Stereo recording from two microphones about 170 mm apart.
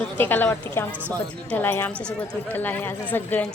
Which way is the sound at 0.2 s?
10° left (ahead or behind).